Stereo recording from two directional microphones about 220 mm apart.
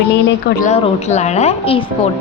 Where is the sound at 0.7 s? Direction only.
30° left (ahead or behind).